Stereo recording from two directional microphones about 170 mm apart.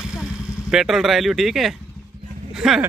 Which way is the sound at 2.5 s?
5° right (ahead or behind).